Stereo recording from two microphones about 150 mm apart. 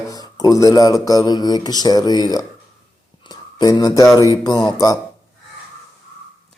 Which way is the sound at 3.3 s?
30° left (ahead or behind).